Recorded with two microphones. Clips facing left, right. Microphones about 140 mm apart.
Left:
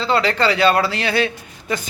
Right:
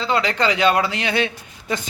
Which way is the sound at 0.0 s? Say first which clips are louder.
Left 2 dB; 20° right (ahead or behind).